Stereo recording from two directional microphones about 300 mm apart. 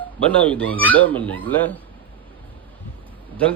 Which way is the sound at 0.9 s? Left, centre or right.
Centre.